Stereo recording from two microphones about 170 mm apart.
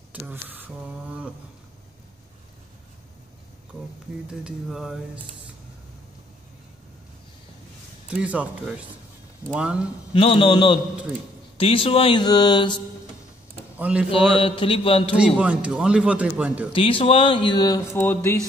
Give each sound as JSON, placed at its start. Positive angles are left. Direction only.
{"t": 0.1, "sound": "a sound", "side_deg": -10}
{"t": 4.3, "sound": "speech", "side_deg": -5}
{"t": 8.1, "sound": "speech", "side_deg": -5}
{"t": 10.1, "sound": "mantra", "side_deg": 35}
{"t": 11.5, "sound": "speech", "side_deg": 35}
{"t": 13.7, "sound": "speech", "side_deg": -10}
{"t": 14.1, "sound": "mantra", "side_deg": 30}
{"t": 15.1, "sound": "speech", "side_deg": -5}
{"t": 16.7, "sound": "mantra", "side_deg": 30}
{"t": 17.9, "sound": "a sound", "side_deg": 10}